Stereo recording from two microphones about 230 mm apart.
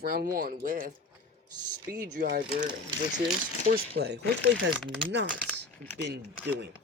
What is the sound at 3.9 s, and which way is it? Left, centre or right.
Speech, right.